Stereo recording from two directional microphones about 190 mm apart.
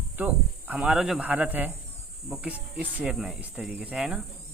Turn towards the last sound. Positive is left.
turn(degrees=-5)  # may be behind; listen again after turning